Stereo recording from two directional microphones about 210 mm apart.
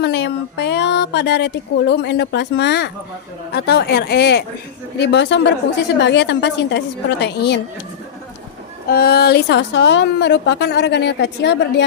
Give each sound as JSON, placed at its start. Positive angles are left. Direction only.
{"t": 0.0, "sound": "a woman's voice", "side_deg": 55}
{"t": 8.9, "sound": "a woman's voice", "side_deg": 50}